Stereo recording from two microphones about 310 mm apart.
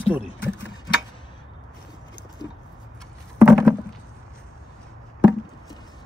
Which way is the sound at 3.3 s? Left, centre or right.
Centre.